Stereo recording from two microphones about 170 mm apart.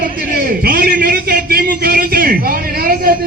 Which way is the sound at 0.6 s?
60° right (ahead or behind).